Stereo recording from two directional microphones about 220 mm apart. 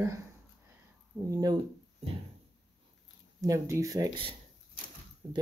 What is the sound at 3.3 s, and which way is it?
Speech, 15° right (ahead or behind).